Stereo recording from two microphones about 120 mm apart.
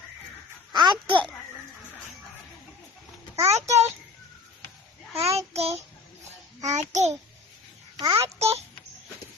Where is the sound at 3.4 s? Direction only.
65° right (ahead or behind).